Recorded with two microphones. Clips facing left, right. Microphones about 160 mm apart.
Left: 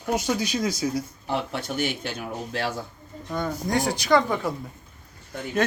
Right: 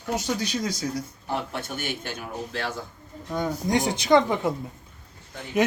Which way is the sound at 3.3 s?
15° right (ahead or behind).